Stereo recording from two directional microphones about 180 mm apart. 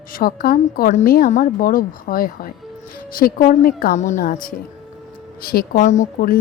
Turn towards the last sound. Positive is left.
turn(degrees=50)  # may be behind; listen again after turning